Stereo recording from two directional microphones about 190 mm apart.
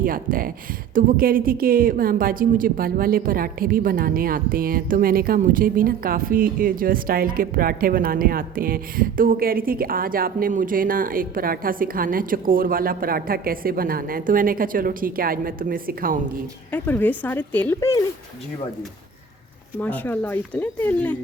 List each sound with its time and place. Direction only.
0.0 s a woman's voice: 50° right (ahead or behind)
16.7 s speech: 10° left (ahead or behind)
19.8 s speech: 10° left (ahead or behind)